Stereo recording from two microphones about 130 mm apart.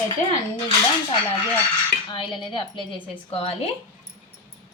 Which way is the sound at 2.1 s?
35° left (ahead or behind).